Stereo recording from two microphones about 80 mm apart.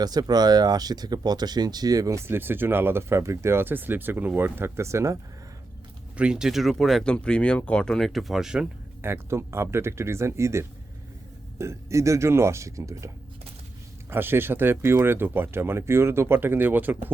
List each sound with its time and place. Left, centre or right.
0.0 s speech: right
6.1 s speech: centre
9.0 s speech: right
14.1 s speech: right